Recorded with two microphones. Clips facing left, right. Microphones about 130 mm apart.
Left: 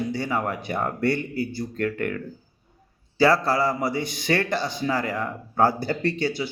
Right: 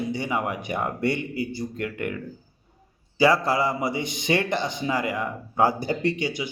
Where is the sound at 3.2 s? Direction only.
15° right (ahead or behind).